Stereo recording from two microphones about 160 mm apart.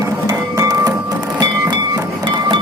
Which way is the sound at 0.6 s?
25° right (ahead or behind).